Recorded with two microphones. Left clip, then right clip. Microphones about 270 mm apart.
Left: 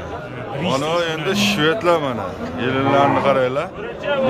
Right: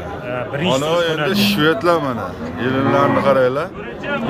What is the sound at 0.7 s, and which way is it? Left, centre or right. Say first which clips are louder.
Speech: right 2 dB; centre.